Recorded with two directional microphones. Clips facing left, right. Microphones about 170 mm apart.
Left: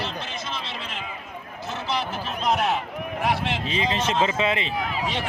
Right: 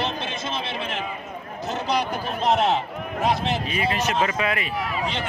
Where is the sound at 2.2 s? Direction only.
30° right (ahead or behind).